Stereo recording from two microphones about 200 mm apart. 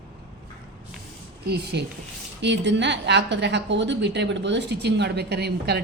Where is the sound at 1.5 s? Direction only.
55° right (ahead or behind).